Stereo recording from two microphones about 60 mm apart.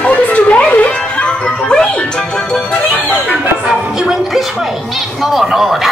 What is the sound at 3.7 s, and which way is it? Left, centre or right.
Speech, centre.